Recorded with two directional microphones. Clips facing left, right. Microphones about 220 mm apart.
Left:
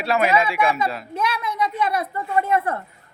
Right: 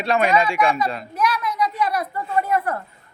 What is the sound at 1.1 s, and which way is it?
A woman's voice, 25° left (ahead or behind).